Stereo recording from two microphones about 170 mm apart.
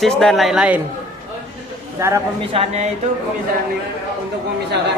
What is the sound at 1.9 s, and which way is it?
Speech, 15° right (ahead or behind).